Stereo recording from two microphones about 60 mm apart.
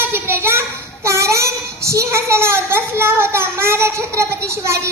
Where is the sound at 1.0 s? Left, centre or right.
Right.